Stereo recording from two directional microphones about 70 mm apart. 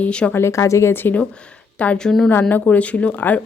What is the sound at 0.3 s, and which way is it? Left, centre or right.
Speech, left.